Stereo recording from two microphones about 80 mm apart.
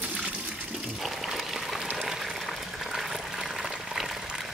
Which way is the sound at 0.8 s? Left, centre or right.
Centre.